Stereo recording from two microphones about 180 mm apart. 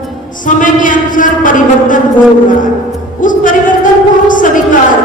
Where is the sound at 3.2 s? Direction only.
45° left (ahead or behind).